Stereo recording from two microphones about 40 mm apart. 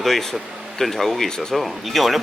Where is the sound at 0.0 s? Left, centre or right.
Centre.